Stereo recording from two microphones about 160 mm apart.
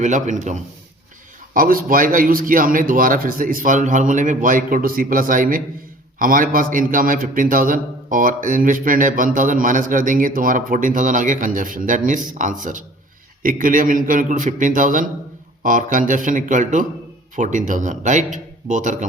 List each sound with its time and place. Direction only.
0.0 s a man's voice: 50° right (ahead or behind)
1.5 s a man's voice: 60° right (ahead or behind)